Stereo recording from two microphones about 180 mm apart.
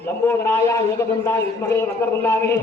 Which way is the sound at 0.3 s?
10° left (ahead or behind).